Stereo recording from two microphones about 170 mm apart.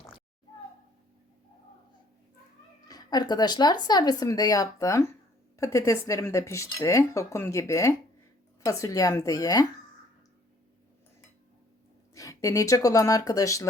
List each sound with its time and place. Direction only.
2.8 s speech: 25° left (ahead or behind)
12.1 s speech: 20° left (ahead or behind)